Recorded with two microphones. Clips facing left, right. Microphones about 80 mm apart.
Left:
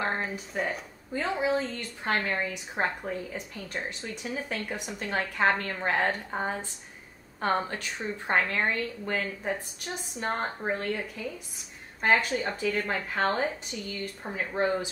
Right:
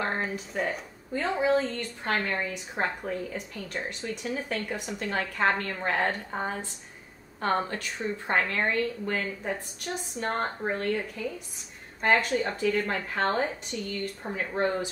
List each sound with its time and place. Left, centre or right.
0.0 s a woman's voice: centre